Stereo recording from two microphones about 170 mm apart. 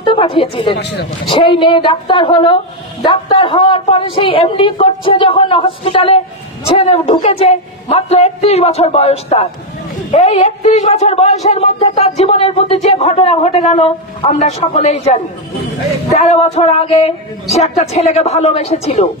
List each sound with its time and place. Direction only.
0.0 s speech: 30° left (ahead or behind)
0.7 s speech: 80° left
1.4 s speech: 30° left (ahead or behind)
16.1 s speech: 40° left (ahead or behind)